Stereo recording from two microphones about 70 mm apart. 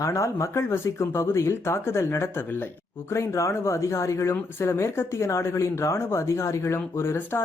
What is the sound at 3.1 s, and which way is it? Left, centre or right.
Speech, left.